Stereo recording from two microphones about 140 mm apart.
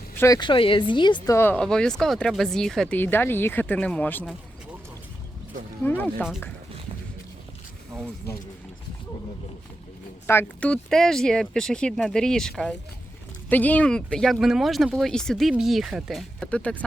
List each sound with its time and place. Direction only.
0.3 s speech: 35° left (ahead or behind)
1.3 s speech: 15° left (ahead or behind)
1.5 s speech: 5° left (ahead or behind)
5.8 s speech: 10° left (ahead or behind)
10.2 s speech: 10° left (ahead or behind)